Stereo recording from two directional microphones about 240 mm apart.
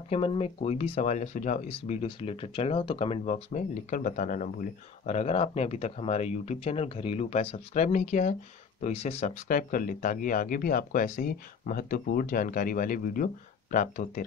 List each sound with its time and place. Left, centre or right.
0.1 s speech: left